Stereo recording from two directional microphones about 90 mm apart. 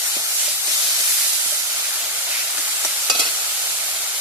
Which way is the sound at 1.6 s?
25° right (ahead or behind).